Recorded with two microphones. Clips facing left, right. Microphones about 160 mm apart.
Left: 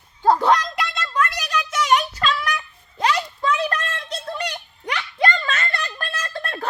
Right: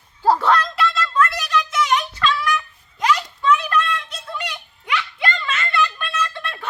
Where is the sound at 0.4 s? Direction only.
15° left (ahead or behind).